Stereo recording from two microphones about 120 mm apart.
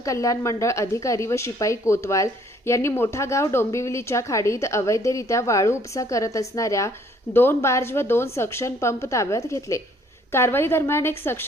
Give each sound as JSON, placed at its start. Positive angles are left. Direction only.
{"t": 0.0, "sound": "a woman's voice", "side_deg": 25}